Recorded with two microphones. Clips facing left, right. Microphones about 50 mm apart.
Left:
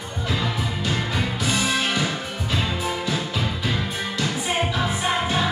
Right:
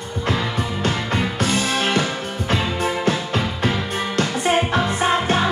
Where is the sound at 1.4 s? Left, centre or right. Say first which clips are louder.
Right 1 dB; right.